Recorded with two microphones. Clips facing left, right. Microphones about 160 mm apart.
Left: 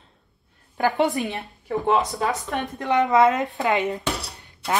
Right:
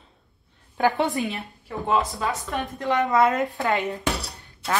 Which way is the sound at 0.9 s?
20° left (ahead or behind).